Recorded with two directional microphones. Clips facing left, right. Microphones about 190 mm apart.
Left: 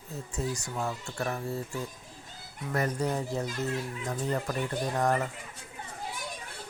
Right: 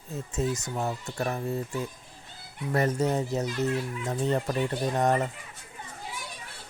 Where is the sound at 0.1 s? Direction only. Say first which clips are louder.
Right 4 dB; 20° right (ahead or behind).